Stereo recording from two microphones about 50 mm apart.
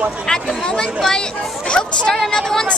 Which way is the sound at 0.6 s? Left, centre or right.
Centre.